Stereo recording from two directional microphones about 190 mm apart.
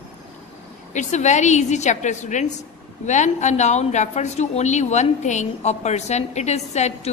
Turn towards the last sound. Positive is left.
turn(degrees=35)  # may be behind; listen again after turning